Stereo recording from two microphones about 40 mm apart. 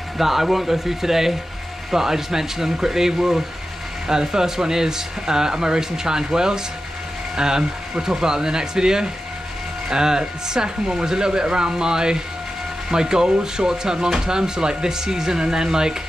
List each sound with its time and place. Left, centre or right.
0.2 s speech: centre